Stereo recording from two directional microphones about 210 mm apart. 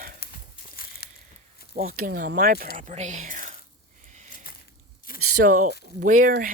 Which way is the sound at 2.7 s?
35° right (ahead or behind).